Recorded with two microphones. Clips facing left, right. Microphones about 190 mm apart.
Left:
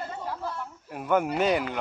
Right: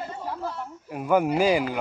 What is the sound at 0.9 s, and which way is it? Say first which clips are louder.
Speech: right 3 dB; centre (ahead or behind).